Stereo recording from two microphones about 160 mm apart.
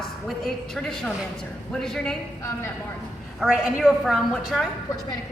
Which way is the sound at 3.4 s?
5° right (ahead or behind).